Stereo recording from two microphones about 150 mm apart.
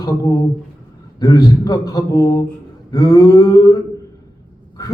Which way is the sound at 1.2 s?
25° left (ahead or behind).